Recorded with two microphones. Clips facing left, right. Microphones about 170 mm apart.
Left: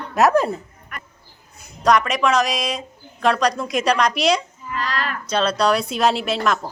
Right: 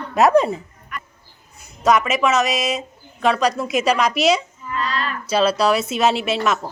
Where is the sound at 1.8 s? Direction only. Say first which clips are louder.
Right 1 dB; 5° right (ahead or behind).